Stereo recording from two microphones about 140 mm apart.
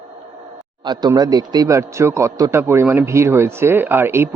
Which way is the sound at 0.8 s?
30° right (ahead or behind).